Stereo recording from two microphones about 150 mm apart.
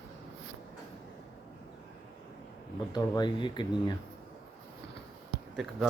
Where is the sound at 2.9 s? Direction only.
30° left (ahead or behind).